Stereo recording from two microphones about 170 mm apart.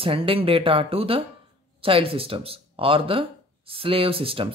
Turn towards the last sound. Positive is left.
turn(degrees=-30)  # may be behind; listen again after turning